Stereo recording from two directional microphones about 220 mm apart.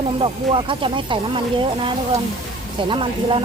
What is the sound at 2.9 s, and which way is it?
Speech, 25° right (ahead or behind).